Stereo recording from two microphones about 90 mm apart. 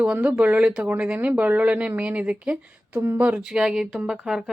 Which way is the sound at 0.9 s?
20° right (ahead or behind).